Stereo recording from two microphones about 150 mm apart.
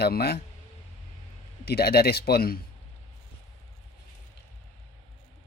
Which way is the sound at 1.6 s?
90° left.